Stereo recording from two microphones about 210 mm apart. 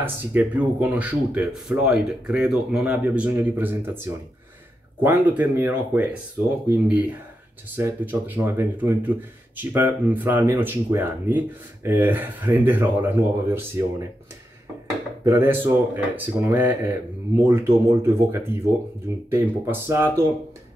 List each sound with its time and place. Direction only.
0.0 s speech: 10° right (ahead or behind)
15.2 s speech: 10° right (ahead or behind)